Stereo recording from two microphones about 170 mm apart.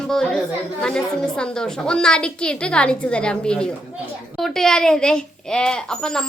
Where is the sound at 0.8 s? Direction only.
5° left (ahead or behind).